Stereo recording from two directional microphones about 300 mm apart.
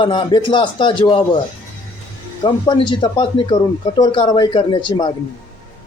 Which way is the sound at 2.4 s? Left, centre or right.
Centre.